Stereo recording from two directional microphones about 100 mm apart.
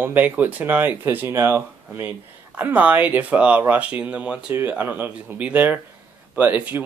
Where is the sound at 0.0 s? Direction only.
20° right (ahead or behind).